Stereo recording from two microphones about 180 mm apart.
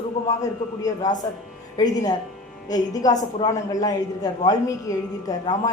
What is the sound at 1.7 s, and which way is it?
A man's voice, 20° left (ahead or behind).